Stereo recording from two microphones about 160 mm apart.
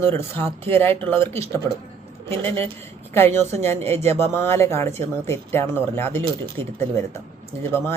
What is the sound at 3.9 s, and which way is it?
Speech, 45° right (ahead or behind).